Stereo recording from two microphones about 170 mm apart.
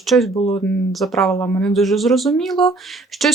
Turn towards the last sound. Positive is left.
turn(degrees=0)  # may be behind; listen again after turning